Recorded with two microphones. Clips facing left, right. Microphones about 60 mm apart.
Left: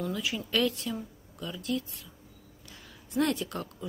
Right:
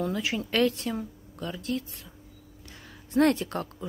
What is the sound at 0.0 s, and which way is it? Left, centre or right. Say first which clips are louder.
Speech: right 4 dB; right.